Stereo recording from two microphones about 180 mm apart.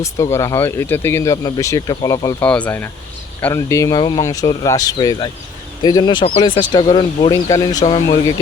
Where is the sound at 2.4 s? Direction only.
5° left (ahead or behind).